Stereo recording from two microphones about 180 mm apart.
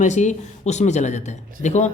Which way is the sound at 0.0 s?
40° left (ahead or behind).